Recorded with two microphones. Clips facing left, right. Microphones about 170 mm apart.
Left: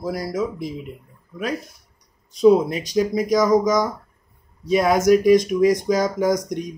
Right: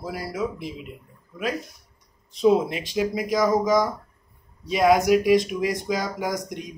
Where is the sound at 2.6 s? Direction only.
40° left (ahead or behind).